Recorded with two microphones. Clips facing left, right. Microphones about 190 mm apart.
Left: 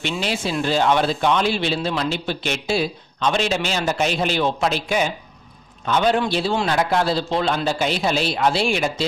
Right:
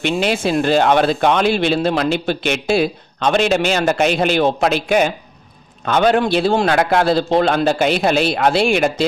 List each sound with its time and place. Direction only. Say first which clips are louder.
0.0 s speech: right 7 dB; 55° right (ahead or behind)